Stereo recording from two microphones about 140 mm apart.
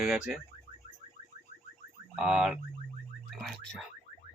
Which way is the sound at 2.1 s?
5° right (ahead or behind).